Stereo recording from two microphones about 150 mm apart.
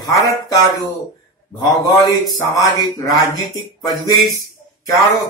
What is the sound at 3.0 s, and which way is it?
Speech, 25° left (ahead or behind).